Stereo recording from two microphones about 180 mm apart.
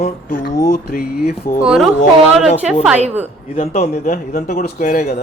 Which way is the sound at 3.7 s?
40° left (ahead or behind).